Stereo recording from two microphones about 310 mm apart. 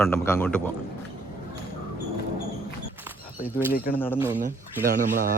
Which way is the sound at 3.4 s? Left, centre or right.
Left.